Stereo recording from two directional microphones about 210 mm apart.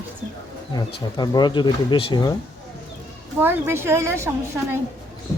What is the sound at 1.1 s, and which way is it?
Speech, 20° left (ahead or behind).